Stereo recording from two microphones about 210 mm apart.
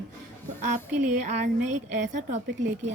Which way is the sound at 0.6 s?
35° right (ahead or behind).